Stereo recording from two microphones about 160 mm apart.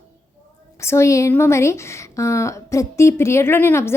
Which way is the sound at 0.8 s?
15° left (ahead or behind).